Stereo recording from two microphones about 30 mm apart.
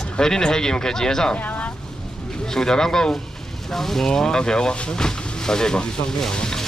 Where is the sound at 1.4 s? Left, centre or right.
Left.